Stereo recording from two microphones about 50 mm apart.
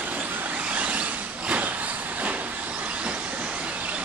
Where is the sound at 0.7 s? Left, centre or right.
Right.